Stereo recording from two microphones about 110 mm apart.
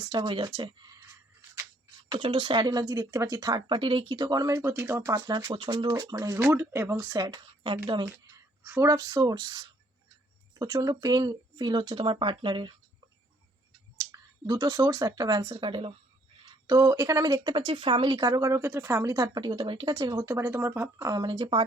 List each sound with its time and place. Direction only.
0.0 s speech: 40° right (ahead or behind)
2.0 s speech: 45° right (ahead or behind); by 5.5 s 30° right (ahead or behind)
5.5 s speech: 45° right (ahead or behind)
8.6 s speech: 25° right (ahead or behind); by 12.7 s 45° right (ahead or behind)
14.0 s speech: 35° right (ahead or behind); by 15.9 s 50° right (ahead or behind)
16.6 s speech: 35° right (ahead or behind)
19.9 s speech: 35° right (ahead or behind)
21.1 s speech: 40° right (ahead or behind)